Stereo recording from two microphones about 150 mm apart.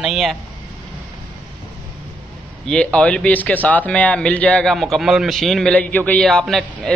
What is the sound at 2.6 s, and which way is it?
A man's voice, 5° left (ahead or behind).